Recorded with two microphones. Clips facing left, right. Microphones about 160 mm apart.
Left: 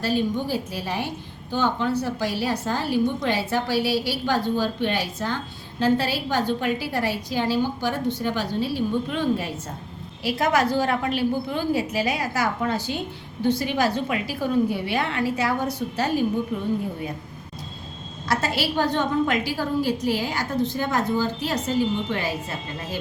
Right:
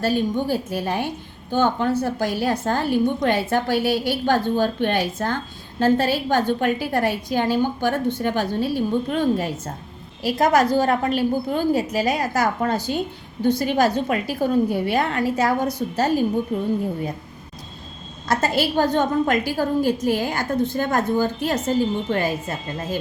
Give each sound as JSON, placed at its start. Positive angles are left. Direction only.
{"t": 0.0, "sound": "a woman's voice", "side_deg": -50}
{"t": 18.3, "sound": "a woman's voice", "side_deg": -45}